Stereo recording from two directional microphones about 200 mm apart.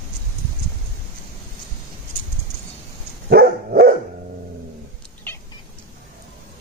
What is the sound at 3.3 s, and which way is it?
Dog, 50° right (ahead or behind).